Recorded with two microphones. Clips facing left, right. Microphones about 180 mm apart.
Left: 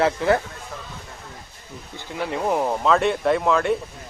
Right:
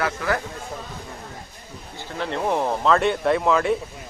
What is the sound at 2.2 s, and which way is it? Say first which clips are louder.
Speech: left 1 dB; 5° left (ahead or behind).